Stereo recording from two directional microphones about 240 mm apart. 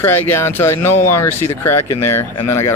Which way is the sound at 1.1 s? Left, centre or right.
Left.